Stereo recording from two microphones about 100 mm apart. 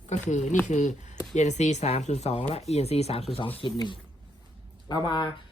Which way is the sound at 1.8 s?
90° left.